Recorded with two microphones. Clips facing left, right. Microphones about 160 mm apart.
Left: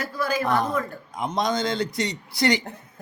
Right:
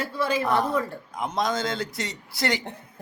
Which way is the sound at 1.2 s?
Centre (ahead or behind).